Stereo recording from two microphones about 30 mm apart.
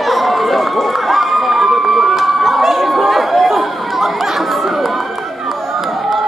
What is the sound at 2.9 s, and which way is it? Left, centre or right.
Chatter, centre.